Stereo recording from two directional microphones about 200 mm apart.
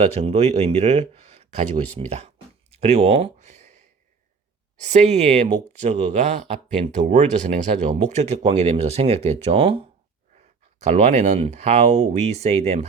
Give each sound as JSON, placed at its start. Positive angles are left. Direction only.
{"t": 0.0, "sound": "speech", "side_deg": -30}
{"t": 4.8, "sound": "speech", "side_deg": -35}